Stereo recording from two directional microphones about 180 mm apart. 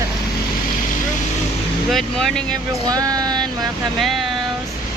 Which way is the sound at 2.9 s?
20° right (ahead or behind).